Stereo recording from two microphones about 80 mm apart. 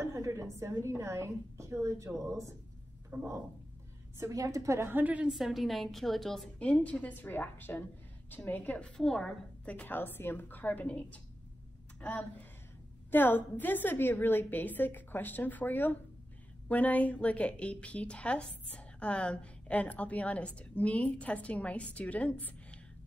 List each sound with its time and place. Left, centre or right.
0.0 s a woman's voice: right
4.9 s a woman's voice: centre
5.3 s a woman's voice: centre
6.6 s a woman's voice: centre
9.7 s a woman's voice: left